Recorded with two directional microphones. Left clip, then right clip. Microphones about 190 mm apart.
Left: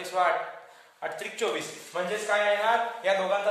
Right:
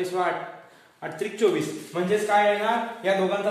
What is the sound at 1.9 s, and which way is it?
Speech, 10° left (ahead or behind).